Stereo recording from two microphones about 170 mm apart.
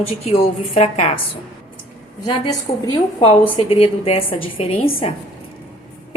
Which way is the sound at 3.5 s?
35° left (ahead or behind).